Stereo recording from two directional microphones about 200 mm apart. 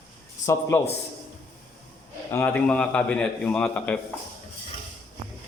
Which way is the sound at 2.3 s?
10° left (ahead or behind).